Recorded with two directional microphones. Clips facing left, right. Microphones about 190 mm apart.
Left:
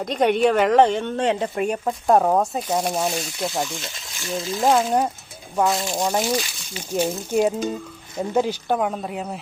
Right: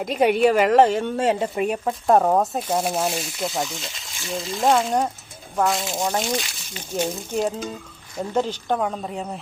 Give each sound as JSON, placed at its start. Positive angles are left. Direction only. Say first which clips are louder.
{"t": 0.0, "sound": "speech", "louder": "right 1 dB", "side_deg": -5}